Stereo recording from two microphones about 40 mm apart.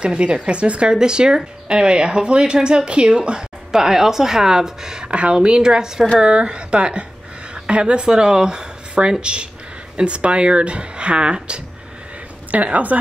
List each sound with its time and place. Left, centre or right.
0.0 s speech: right
12.6 s a woman's voice: right